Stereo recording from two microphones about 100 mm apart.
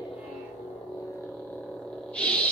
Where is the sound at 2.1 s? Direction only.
15° left (ahead or behind).